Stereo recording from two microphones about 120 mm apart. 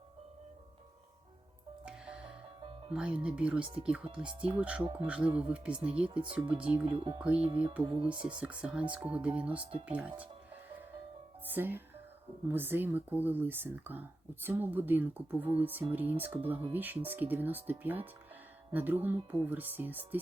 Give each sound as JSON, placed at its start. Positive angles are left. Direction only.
{"t": 1.8, "sound": "music", "side_deg": -5}
{"t": 2.6, "sound": "music", "side_deg": -40}
{"t": 2.9, "sound": "speech", "side_deg": -10}
{"t": 6.8, "sound": "speech", "side_deg": -50}
{"t": 7.2, "sound": "speech", "side_deg": -10}
{"t": 7.9, "sound": "speech", "side_deg": -45}
{"t": 8.4, "sound": "speech", "side_deg": -10}
{"t": 11.4, "sound": "speech", "side_deg": -15}